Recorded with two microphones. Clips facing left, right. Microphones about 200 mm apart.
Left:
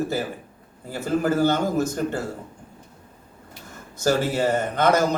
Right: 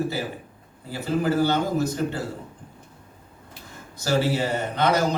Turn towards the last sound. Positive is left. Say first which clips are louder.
# left 2 dB
turn(degrees=45)  # may be behind; listen again after turning